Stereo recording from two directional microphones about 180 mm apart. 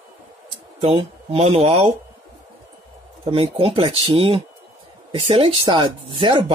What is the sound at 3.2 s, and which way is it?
Speech, 30° right (ahead or behind).